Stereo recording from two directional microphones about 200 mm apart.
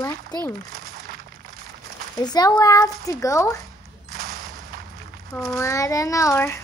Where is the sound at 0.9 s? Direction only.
45° right (ahead or behind).